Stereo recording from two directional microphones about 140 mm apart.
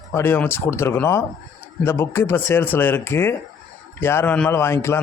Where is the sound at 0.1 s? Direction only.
15° left (ahead or behind).